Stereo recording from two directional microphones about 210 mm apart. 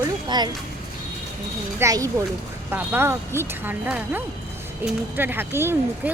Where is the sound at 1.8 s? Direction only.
15° right (ahead or behind).